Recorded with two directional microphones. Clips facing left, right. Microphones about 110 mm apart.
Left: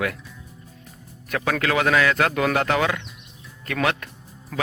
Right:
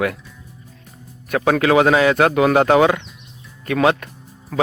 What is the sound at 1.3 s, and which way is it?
Speech, 25° right (ahead or behind).